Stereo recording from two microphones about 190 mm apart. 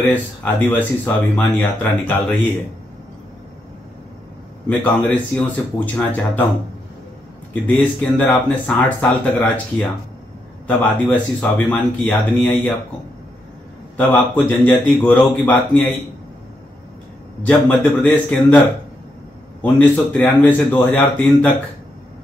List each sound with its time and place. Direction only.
0.0 s speech: 10° left (ahead or behind)
4.6 s speech: 5° left (ahead or behind)
7.6 s speech: 5° left (ahead or behind)
13.9 s speech: 10° left (ahead or behind)
17.5 s speech: 10° left (ahead or behind)
19.6 s speech: 10° left (ahead or behind)